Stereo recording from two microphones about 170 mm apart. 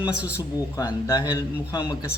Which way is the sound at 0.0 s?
10° right (ahead or behind).